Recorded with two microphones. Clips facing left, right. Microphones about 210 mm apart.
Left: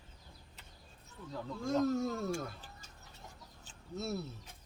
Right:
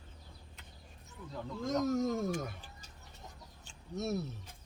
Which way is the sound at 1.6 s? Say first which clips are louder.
Even; 15° right (ahead or behind).